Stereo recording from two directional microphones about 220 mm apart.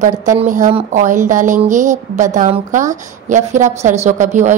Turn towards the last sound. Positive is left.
turn(degrees=-35)  # may be behind; listen again after turning